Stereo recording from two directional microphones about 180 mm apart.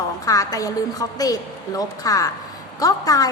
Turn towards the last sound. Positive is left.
turn(degrees=20)  # may be behind; listen again after turning